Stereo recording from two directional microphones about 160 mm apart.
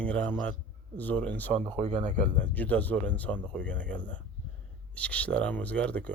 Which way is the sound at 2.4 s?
10° left (ahead or behind).